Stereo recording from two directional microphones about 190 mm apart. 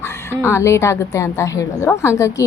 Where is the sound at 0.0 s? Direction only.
15° left (ahead or behind).